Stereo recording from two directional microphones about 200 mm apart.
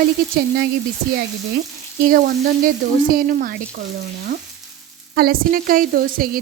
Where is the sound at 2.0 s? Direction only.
50° right (ahead or behind).